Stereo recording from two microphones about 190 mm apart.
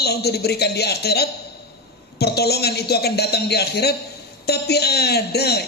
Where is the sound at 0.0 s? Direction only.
55° left (ahead or behind).